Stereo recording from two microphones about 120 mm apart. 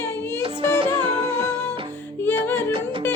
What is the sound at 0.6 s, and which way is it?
Music, 45° right (ahead or behind).